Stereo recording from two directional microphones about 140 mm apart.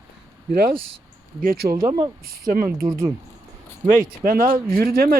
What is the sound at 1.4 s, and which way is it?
Speech, 90° right.